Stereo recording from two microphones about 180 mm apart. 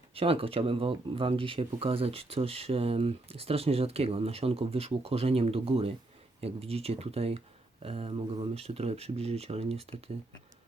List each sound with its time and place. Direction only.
0.1 s speech: 30° right (ahead or behind)